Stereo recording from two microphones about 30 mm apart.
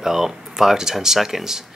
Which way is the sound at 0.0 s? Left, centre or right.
Centre.